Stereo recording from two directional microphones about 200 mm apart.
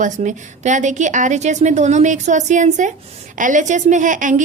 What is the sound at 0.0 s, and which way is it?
A woman's voice, 35° right (ahead or behind).